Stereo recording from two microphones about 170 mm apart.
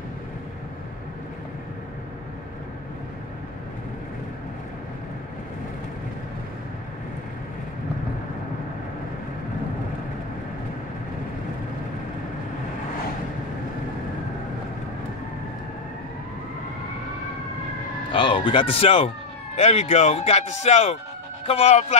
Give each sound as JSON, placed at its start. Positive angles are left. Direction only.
{"t": 18.1, "sound": "speech", "side_deg": 30}